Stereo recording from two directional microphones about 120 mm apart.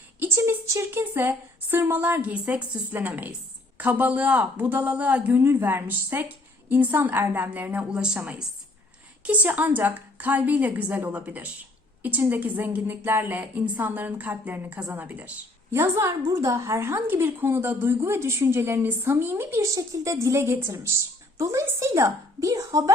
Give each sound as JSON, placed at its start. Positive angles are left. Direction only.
{"t": 0.2, "sound": "a woman's voice", "side_deg": -20}